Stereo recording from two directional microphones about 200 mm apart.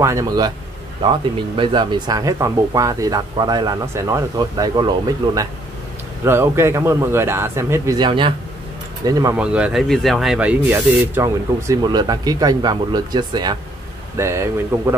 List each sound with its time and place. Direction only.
0.0 s speech: 15° right (ahead or behind)
1.6 s speech: 20° right (ahead or behind)
9.4 s speech: 5° right (ahead or behind)